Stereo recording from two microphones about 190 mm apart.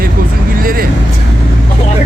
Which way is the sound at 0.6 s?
50° right (ahead or behind).